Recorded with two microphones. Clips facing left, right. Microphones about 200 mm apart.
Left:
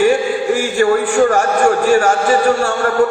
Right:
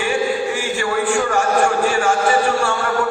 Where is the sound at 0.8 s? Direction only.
40° left (ahead or behind).